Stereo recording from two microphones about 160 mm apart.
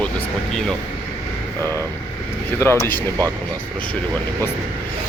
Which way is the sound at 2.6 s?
15° left (ahead or behind).